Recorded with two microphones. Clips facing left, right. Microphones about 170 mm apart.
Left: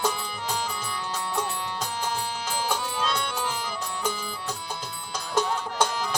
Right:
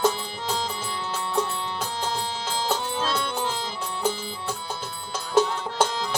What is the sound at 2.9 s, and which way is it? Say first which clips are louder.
Music: right 2 dB; 25° right (ahead or behind).